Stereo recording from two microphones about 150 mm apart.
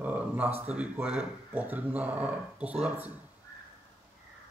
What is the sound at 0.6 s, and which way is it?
Speech, 10° right (ahead or behind).